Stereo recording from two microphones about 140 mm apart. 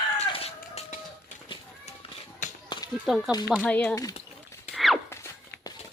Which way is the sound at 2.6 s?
35° left (ahead or behind).